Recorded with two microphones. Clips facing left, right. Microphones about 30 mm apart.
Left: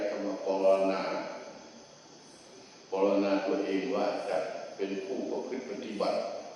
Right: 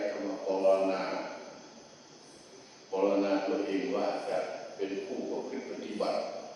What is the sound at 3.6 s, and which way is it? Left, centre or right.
A man's voice, centre.